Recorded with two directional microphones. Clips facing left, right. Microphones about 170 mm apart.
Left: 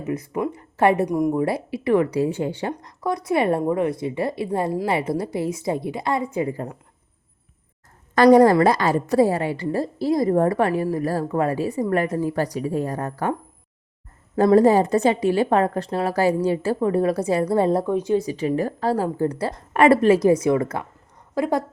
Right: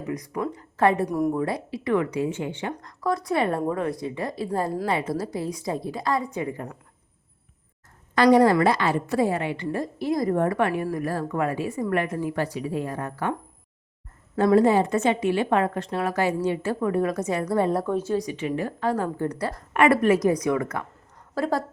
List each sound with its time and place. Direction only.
0.0 s a woman's voice: 25° left (ahead or behind)
1.0 s a woman's voice: 10° left (ahead or behind)
1.5 s a woman's voice: 30° left (ahead or behind)
3.0 s a woman's voice: 25° left (ahead or behind)
8.1 s a woman's voice: 45° left (ahead or behind)
14.3 s a woman's voice: 40° left (ahead or behind)
17.8 s a woman's voice: 15° left (ahead or behind)
18.2 s a woman's voice: 35° left (ahead or behind)
21.3 s a woman's voice: 15° left (ahead or behind)